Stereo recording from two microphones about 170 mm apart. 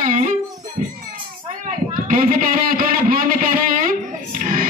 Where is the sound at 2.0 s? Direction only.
50° right (ahead or behind).